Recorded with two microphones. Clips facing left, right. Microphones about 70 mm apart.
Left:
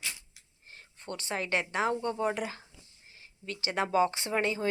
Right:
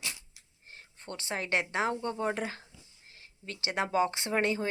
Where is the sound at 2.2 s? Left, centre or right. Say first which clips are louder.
Left 1 dB; right.